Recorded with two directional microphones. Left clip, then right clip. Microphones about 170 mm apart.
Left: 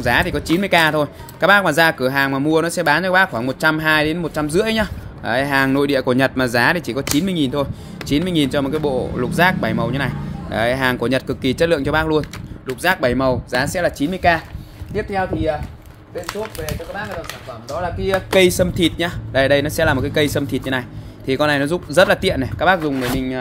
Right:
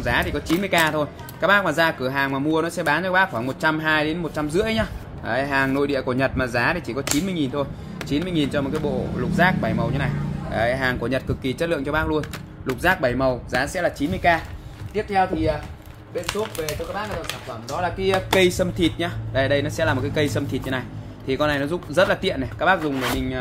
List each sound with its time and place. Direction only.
0.0 s speech: 55° left (ahead or behind)
14.9 s speech: 35° left (ahead or behind)
16.3 s speech: centre (ahead or behind)
18.3 s speech: 55° left (ahead or behind)